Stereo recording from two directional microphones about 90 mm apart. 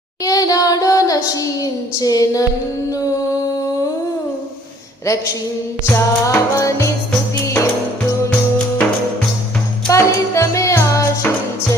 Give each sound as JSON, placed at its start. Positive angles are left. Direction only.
{"t": 0.3, "sound": "a sound", "side_deg": 40}
{"t": 5.0, "sound": "music", "side_deg": 35}
{"t": 9.9, "sound": "music", "side_deg": 35}